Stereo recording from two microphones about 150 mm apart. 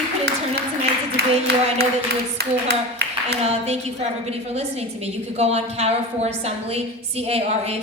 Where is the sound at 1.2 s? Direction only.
90° right.